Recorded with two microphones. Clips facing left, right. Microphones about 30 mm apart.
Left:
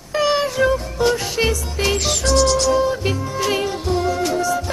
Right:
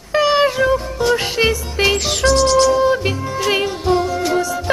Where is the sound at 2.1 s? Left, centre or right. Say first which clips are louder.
Right 1 dB; right.